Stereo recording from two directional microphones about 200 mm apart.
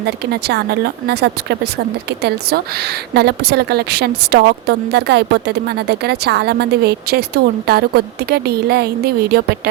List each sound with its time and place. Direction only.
0.4 s a woman's voice: 55° right (ahead or behind)